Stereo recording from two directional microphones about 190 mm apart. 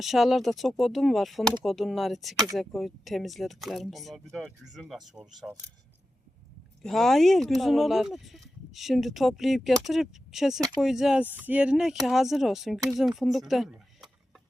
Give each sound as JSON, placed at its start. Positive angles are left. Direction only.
{"t": 0.0, "sound": "speech", "side_deg": 0}
{"t": 2.3, "sound": "speech", "side_deg": -20}
{"t": 2.6, "sound": "speech", "side_deg": 0}
{"t": 6.8, "sound": "speech", "side_deg": 0}